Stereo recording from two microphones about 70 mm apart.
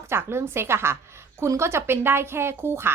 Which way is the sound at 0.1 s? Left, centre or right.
Right.